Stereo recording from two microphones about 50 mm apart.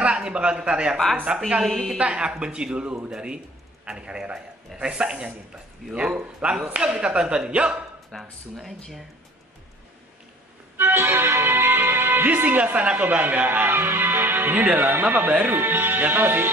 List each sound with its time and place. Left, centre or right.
0.0 s a man's voice: right
8.2 s speech: centre
10.8 s speech: right
13.7 s speech: right